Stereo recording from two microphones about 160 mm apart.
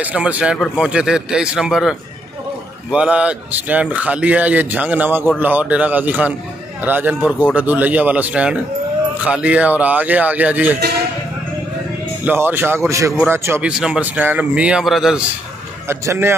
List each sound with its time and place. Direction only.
0.0 s a man's voice: 10° right (ahead or behind)
12.3 s speech: 10° right (ahead or behind)
15.9 s speech: 15° right (ahead or behind)